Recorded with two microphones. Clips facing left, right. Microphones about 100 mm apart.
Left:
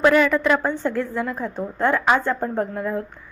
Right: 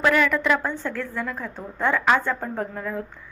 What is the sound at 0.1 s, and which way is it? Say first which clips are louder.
A woman's voice: left 3 dB; 15° left (ahead or behind).